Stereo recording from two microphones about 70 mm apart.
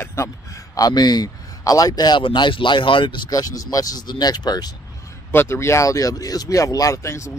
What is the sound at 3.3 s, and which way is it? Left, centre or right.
A man's voice, left.